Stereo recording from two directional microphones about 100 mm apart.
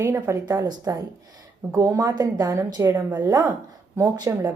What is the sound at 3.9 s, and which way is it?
Speech, 40° right (ahead or behind).